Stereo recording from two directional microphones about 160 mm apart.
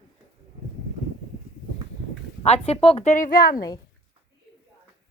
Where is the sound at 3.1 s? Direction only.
60° left (ahead or behind).